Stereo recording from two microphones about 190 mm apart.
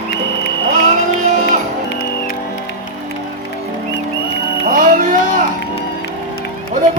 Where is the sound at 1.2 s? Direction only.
40° right (ahead or behind).